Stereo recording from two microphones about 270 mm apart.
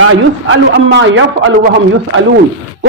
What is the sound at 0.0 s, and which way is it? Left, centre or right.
A man's voice, right.